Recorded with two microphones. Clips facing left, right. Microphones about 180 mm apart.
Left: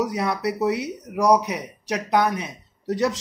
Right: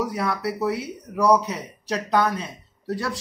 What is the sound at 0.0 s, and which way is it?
Speech, 20° left (ahead or behind).